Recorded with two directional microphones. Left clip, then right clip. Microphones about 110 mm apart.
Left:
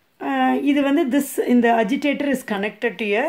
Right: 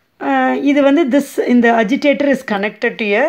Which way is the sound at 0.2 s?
30° right (ahead or behind).